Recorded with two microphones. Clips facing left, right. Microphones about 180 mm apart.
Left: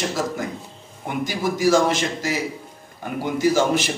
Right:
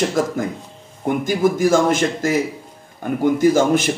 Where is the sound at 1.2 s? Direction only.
50° right (ahead or behind).